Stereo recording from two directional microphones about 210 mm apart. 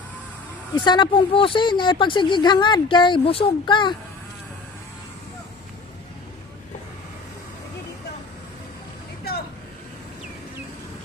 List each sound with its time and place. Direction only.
0.7 s speech: 20° left (ahead or behind)